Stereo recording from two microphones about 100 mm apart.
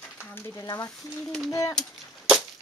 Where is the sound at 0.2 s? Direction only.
25° left (ahead or behind).